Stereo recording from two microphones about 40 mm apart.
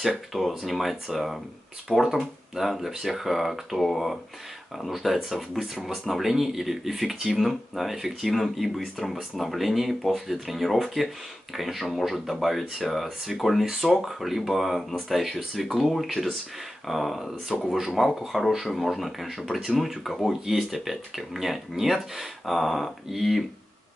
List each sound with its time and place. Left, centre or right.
0.3 s speech: centre